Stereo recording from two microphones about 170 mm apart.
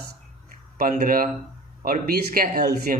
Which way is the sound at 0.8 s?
55° right (ahead or behind).